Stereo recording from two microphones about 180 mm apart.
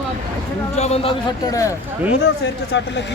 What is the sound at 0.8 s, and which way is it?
Speech, 35° left (ahead or behind).